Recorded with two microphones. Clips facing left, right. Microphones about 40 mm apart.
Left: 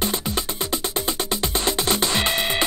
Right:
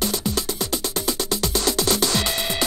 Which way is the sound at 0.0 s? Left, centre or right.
Left.